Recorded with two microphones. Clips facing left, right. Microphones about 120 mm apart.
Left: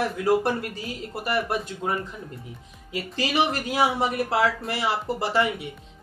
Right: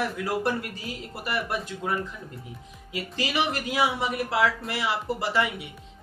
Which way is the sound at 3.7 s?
40° left (ahead or behind).